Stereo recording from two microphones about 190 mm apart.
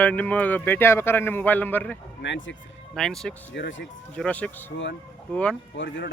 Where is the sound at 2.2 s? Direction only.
70° left (ahead or behind).